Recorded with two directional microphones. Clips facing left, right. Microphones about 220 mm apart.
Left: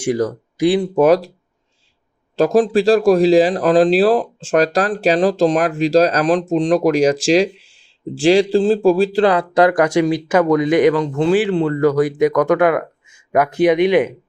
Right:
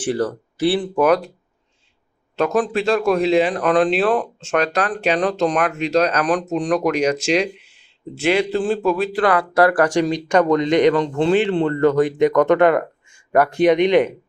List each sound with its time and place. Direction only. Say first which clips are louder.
0.0 s speech: left 3 dB; 10° left (ahead or behind)
0.9 s speech: left 4 dB; 25° left (ahead or behind)
2.3 s speech: left 5 dB; 30° left (ahead or behind); by 14.1 s 5° left (ahead or behind)